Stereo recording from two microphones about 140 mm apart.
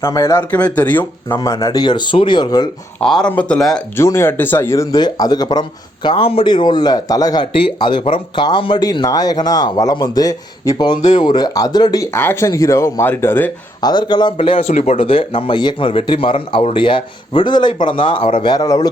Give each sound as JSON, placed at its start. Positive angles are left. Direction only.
{"t": 0.0, "sound": "speech", "side_deg": 20}
{"t": 0.5, "sound": "speech", "side_deg": 10}
{"t": 1.4, "sound": "a man's voice", "side_deg": 25}
{"t": 3.0, "sound": "speech", "side_deg": 5}
{"t": 3.9, "sound": "speech", "side_deg": 20}
{"t": 12.1, "sound": "speech", "side_deg": 15}
{"t": 13.8, "sound": "a man's voice", "side_deg": 30}
{"t": 14.7, "sound": "speech", "side_deg": 55}
{"t": 14.9, "sound": "a man's voice", "side_deg": 40}